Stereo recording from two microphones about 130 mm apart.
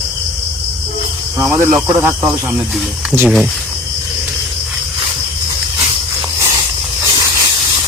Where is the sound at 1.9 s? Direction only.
20° right (ahead or behind).